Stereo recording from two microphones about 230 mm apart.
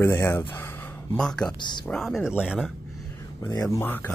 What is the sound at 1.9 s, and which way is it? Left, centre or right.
Speech, centre.